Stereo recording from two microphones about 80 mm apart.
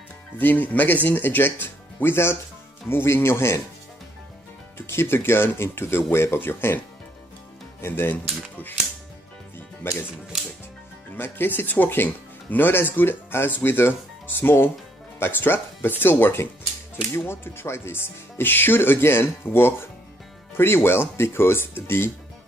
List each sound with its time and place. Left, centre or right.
0.4 s speech: left
4.7 s speech: left
7.8 s speech: left
9.8 s speech: left
10.3 s music: centre
11.1 s speech: left